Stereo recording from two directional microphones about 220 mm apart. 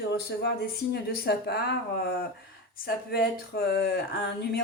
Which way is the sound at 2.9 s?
45° left (ahead or behind).